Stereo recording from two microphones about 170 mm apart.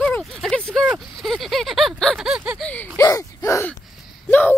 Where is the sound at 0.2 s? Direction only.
Centre (ahead or behind).